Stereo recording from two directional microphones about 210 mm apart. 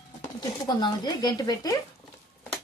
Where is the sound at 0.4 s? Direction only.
20° left (ahead or behind).